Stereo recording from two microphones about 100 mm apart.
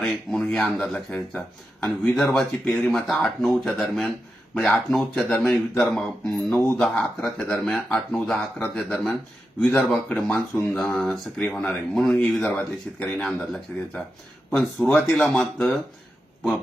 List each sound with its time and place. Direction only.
0.0 s speech: 5° left (ahead or behind)
6.5 s speech: 20° left (ahead or behind)
6.7 s speech: 5° left (ahead or behind)